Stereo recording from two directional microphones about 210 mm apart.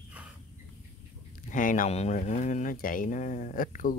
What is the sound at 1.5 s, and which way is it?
Speech, 40° left (ahead or behind).